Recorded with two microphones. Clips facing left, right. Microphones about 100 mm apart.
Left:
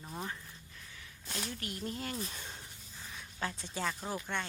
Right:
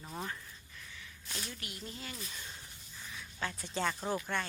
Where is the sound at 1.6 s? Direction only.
45° left (ahead or behind).